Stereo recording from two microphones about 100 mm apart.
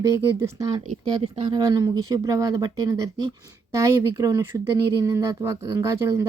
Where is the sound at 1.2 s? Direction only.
70° right (ahead or behind).